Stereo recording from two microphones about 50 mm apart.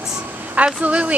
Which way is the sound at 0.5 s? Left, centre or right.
Right.